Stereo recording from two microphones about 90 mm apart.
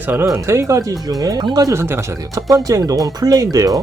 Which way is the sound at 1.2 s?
50° right (ahead or behind).